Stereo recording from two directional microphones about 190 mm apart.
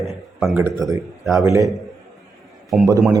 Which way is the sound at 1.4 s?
15° right (ahead or behind).